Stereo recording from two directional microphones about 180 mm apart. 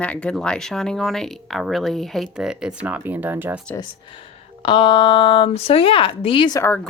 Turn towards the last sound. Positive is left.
turn(degrees=10)  # may be behind; listen again after turning